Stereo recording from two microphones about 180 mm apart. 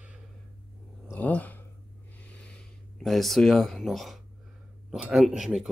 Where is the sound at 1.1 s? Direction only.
10° left (ahead or behind).